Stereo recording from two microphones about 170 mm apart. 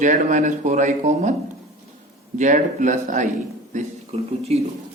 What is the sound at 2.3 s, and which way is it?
A man's voice, 45° right (ahead or behind).